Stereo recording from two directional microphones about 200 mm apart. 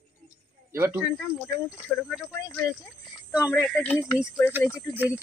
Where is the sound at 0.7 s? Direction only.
10° right (ahead or behind).